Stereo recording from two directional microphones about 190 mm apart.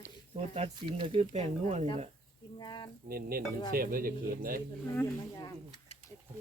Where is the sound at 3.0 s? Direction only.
50° right (ahead or behind).